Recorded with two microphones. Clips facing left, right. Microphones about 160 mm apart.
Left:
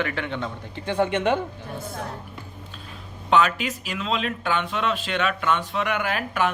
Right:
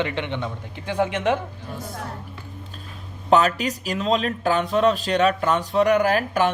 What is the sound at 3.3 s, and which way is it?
Speech, 40° right (ahead or behind).